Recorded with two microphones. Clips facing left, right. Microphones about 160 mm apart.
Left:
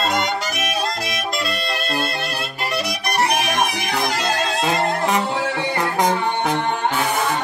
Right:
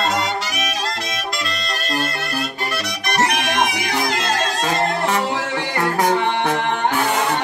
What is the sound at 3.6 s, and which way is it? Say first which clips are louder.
Music: right 1 dB; 85° right.